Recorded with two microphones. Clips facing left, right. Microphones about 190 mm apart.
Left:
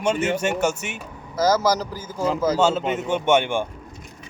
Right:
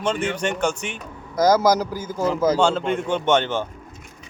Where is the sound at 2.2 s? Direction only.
10° left (ahead or behind).